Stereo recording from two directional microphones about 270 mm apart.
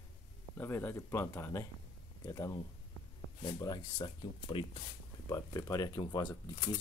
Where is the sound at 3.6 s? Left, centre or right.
Centre.